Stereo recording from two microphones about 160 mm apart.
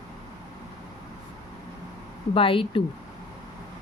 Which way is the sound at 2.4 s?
35° left (ahead or behind).